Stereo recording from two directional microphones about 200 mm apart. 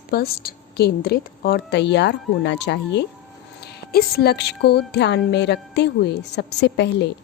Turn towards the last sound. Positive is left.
turn(degrees=60)  # may be behind; listen again after turning